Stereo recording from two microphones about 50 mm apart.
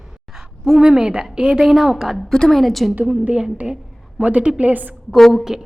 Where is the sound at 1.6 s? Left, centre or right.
Centre.